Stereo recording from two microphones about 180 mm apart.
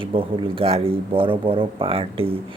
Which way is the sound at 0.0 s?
30° right (ahead or behind).